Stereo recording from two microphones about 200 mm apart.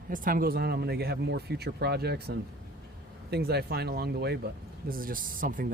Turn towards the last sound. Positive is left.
turn(degrees=-45)  # may be behind; listen again after turning